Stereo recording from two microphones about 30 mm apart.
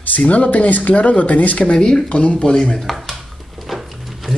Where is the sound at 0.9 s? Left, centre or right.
Left.